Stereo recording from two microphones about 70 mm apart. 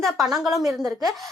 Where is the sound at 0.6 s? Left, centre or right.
Right.